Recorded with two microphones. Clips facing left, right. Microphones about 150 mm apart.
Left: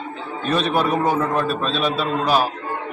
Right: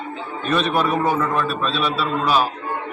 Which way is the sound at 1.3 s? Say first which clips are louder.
Left 1 dB; 40° left (ahead or behind).